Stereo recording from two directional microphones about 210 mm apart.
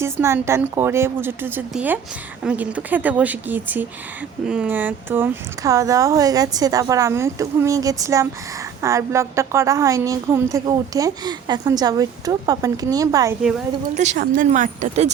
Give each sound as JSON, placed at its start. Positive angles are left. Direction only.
{"t": 0.0, "sound": "a woman's voice", "side_deg": -10}
{"t": 13.9, "sound": "speech", "side_deg": -35}